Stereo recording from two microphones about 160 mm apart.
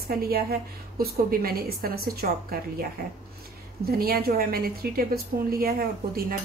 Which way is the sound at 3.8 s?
70° right (ahead or behind).